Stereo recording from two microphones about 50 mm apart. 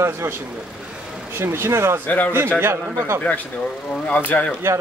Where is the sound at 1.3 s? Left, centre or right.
Right.